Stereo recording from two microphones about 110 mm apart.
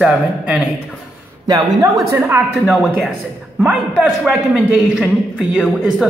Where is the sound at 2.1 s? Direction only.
20° right (ahead or behind).